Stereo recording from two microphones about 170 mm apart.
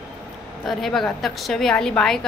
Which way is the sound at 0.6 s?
Centre (ahead or behind).